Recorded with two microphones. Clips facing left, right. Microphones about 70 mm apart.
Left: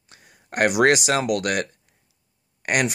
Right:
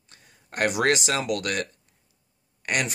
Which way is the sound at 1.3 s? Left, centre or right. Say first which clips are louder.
Left 5 dB; centre.